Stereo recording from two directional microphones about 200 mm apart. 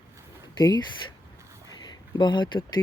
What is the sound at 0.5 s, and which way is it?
Speech, 20° left (ahead or behind).